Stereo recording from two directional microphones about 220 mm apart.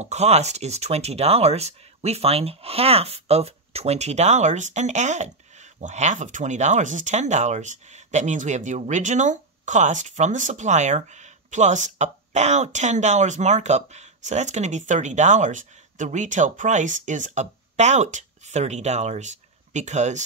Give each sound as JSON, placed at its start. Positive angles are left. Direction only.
{"t": 0.0, "sound": "speech", "side_deg": -30}